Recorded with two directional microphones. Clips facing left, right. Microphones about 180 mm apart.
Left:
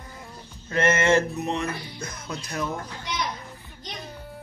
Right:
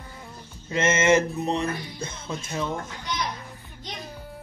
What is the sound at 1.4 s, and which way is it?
Speech, 35° right (ahead or behind).